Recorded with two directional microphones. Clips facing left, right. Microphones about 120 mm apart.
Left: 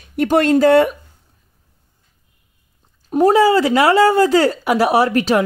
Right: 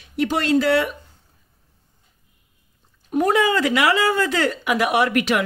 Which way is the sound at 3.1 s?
30° left (ahead or behind).